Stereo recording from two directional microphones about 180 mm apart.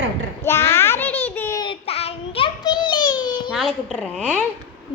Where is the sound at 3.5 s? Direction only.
Centre (ahead or behind).